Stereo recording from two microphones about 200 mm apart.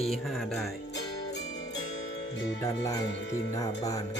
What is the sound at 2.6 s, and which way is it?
Speech, 15° left (ahead or behind).